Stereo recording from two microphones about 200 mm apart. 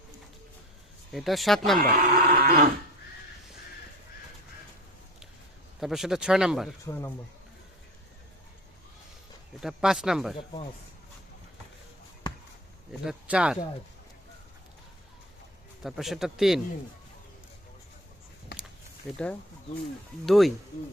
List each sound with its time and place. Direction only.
1.1 s speech: centre (ahead or behind)
2.0 s livestock: 50° right (ahead or behind)
5.8 s speech: centre (ahead or behind)
9.6 s speech: centre (ahead or behind)
13.1 s speech: 5° right (ahead or behind)
15.8 s speech: centre (ahead or behind)
18.5 s a sound: 55° left (ahead or behind)
19.1 s speech: 5° left (ahead or behind)